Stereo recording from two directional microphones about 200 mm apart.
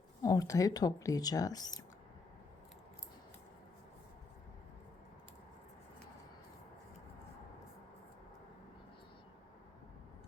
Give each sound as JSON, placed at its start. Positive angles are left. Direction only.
{"t": 0.2, "sound": "speech", "side_deg": 15}